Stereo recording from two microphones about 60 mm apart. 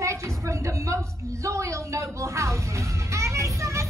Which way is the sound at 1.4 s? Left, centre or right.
Right.